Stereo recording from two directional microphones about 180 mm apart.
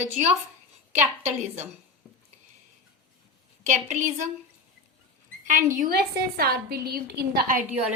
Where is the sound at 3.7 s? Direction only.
40° right (ahead or behind).